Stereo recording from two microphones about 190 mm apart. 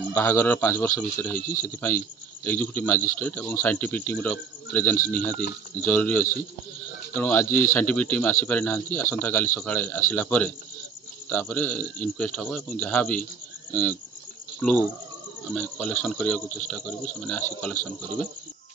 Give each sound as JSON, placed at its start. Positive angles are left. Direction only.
{"t": 0.1, "sound": "speech", "side_deg": 10}
{"t": 1.4, "sound": "speech", "side_deg": 45}
{"t": 1.7, "sound": "speech", "side_deg": 10}
{"t": 16.4, "sound": "speech", "side_deg": 40}
{"t": 17.2, "sound": "speech", "side_deg": 10}